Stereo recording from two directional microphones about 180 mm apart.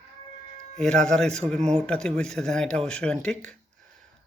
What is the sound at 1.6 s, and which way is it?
Speech, 40° right (ahead or behind).